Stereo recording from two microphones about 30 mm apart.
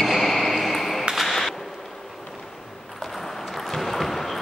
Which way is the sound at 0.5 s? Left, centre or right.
Centre.